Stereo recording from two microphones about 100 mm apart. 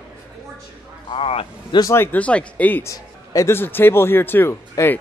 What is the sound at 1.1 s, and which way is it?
Vehicle, 75° left (ahead or behind).